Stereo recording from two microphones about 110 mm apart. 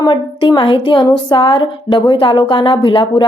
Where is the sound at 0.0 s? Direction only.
45° left (ahead or behind).